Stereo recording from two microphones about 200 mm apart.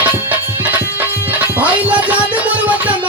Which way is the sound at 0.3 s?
10° right (ahead or behind).